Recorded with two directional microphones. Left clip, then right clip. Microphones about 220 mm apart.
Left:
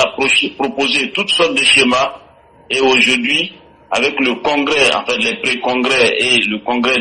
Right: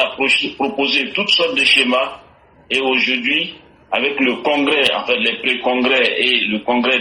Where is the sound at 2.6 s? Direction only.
50° left (ahead or behind).